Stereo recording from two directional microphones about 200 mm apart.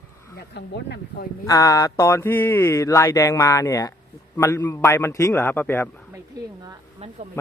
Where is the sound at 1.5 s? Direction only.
15° left (ahead or behind).